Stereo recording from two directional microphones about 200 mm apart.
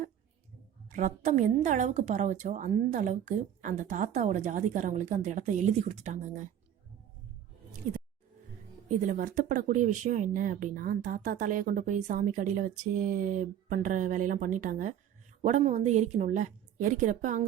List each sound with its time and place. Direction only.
0.9 s speech: 40° right (ahead or behind)
8.9 s speech: 40° right (ahead or behind)